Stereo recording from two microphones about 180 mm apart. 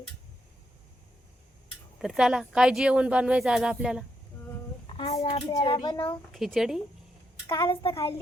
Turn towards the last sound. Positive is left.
turn(degrees=30)  # may be behind; listen again after turning